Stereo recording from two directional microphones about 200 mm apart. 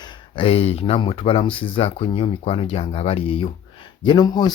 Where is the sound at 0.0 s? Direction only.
30° left (ahead or behind).